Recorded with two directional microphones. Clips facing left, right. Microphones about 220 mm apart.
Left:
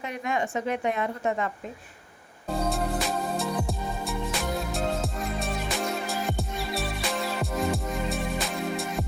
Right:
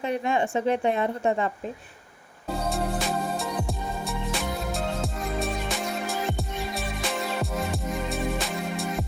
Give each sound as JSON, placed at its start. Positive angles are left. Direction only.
{"t": 0.0, "sound": "a woman's voice", "side_deg": -30}
{"t": 2.6, "sound": "music", "side_deg": 0}